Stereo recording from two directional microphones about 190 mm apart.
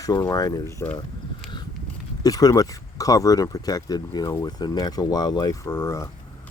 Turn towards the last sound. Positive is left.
turn(degrees=15)  # may be behind; listen again after turning